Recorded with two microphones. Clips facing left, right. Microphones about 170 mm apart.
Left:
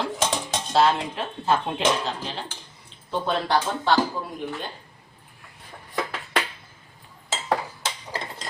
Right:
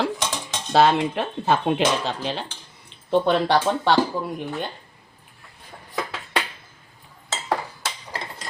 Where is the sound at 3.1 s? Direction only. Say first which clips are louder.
Right 6 dB; 70° right (ahead or behind).